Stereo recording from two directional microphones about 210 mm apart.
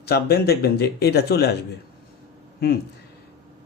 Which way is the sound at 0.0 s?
50° left (ahead or behind).